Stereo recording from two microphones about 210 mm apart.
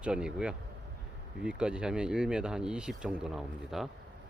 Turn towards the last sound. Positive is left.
turn(degrees=0)  # may be behind; listen again after turning